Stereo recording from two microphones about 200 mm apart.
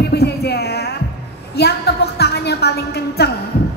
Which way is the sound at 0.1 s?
55° left (ahead or behind).